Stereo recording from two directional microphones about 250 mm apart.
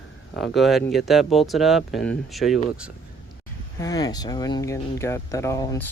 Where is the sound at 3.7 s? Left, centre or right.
Centre.